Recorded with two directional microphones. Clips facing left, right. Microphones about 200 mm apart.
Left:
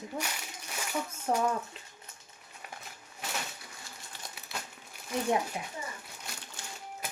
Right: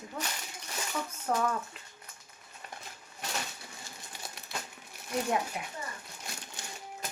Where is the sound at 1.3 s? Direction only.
10° left (ahead or behind).